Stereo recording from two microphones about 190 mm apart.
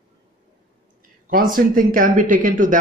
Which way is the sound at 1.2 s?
45° right (ahead or behind).